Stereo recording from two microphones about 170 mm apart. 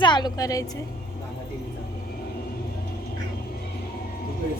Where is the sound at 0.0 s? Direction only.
25° left (ahead or behind).